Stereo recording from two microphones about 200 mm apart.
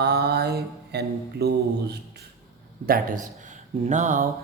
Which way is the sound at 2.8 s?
45° right (ahead or behind).